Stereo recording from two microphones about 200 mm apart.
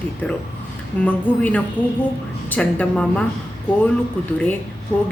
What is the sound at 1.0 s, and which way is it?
Speech, 5° left (ahead or behind).